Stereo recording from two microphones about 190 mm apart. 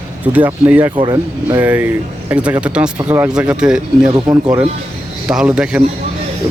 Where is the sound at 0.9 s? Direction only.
25° right (ahead or behind).